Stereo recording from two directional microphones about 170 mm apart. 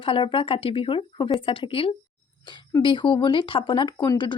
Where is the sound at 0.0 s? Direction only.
30° left (ahead or behind).